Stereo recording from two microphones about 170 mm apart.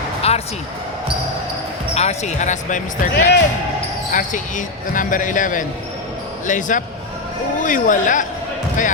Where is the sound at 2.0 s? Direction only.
40° left (ahead or behind).